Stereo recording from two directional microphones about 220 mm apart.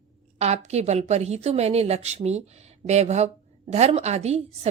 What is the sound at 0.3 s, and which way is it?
A woman's voice, 30° right (ahead or behind).